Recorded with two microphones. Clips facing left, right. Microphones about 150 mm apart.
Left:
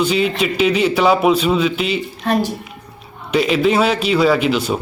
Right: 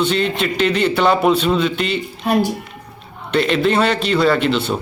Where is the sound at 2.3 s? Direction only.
10° right (ahead or behind).